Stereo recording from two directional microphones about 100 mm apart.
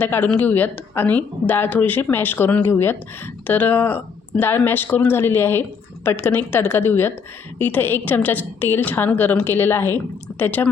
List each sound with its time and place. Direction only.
0.0 s a woman's voice: 15° left (ahead or behind)